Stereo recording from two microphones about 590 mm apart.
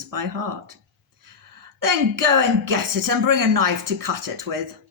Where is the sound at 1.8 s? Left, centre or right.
Right.